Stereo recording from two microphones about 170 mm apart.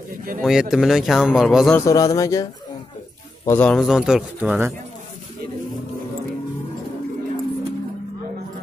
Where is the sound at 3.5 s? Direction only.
10° left (ahead or behind).